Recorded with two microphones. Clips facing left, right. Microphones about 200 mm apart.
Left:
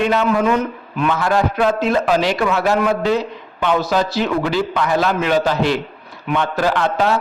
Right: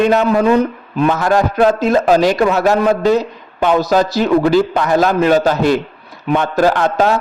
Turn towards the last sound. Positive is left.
turn(degrees=-40)  # may be behind; listen again after turning